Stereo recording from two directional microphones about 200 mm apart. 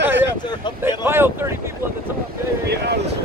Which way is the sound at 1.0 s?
10° right (ahead or behind).